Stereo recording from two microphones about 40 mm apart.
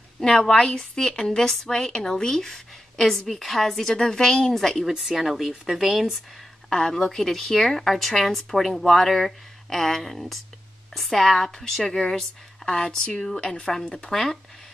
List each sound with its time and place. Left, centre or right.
0.2 s a woman's voice: centre
4.6 s speech: centre
6.7 s a woman's voice: centre
14.1 s speech: centre